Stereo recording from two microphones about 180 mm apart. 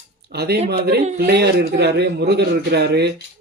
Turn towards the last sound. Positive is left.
turn(degrees=-65)  # may be behind; listen again after turning